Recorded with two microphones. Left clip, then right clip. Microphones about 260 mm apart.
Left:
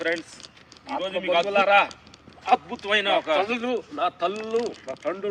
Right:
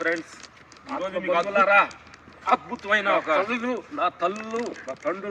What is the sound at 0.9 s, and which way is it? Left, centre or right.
Speech, left.